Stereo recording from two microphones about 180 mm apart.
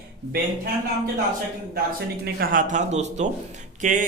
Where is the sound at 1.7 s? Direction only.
60° right (ahead or behind).